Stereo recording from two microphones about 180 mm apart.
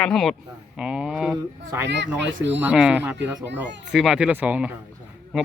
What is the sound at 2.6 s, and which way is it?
Speech, 5° right (ahead or behind).